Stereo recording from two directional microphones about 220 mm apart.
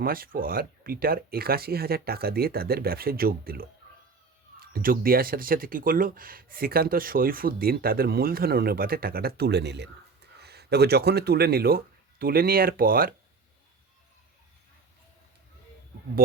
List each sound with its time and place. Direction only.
0.0 s speech: 40° right (ahead or behind)